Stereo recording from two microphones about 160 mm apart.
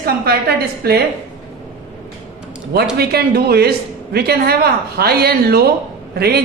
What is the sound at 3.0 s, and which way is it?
A woman's voice, 75° right (ahead or behind).